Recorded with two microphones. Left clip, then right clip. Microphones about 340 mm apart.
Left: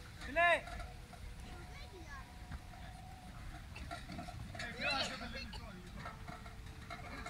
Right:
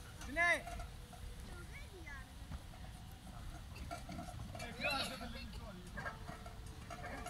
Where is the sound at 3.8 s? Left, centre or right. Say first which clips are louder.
Even; centre.